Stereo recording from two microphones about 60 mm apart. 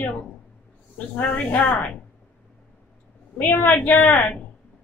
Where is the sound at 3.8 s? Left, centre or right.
Left.